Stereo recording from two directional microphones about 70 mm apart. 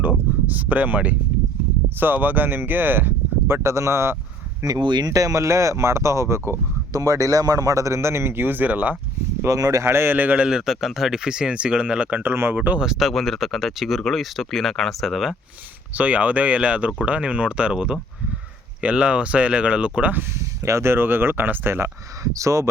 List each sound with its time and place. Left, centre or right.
0.4 s speech: right
4.6 s speech: right
5.0 s speech: right
6.9 s speech: right
9.5 s speech: right
9.8 s a man's voice: right; by 12.2 s centre
12.2 s speech: right
12.8 s speech: centre
15.9 s a man's voice: right
20.3 s speech: right
22.2 s speech: right